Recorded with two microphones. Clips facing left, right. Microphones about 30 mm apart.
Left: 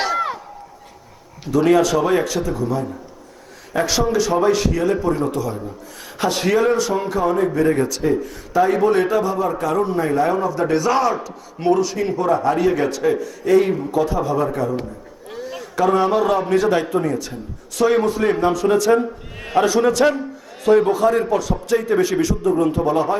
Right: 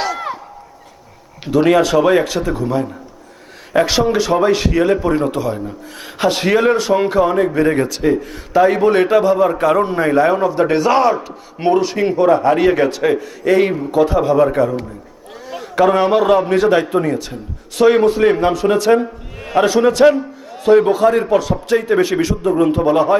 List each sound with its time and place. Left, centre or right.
0.0 s a sound: centre
1.5 s a man's voice: right
3.7 s a man's voice: right
20.0 s a man's voice: centre
20.7 s a man's voice: right
20.9 s a man's voice: right